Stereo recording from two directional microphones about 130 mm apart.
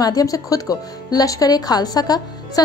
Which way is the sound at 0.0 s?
30° left (ahead or behind).